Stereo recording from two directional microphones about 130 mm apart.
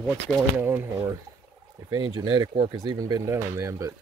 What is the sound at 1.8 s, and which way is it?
Speech, 35° right (ahead or behind).